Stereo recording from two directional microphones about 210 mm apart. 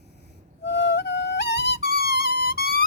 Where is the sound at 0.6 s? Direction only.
55° left (ahead or behind).